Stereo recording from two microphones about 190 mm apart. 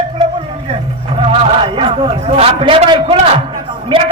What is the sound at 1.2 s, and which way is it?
Music, 30° right (ahead or behind).